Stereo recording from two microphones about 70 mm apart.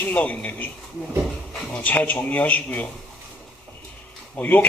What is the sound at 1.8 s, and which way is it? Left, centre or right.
A man's voice, left.